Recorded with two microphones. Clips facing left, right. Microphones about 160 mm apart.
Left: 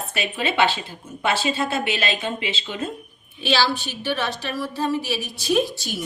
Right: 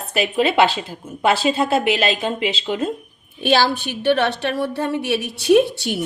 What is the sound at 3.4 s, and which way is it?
A woman's voice, 50° right (ahead or behind).